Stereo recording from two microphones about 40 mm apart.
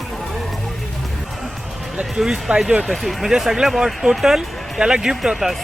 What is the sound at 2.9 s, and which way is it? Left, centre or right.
Speech, centre.